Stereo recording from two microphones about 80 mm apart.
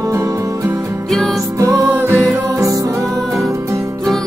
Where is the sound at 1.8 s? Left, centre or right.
Right.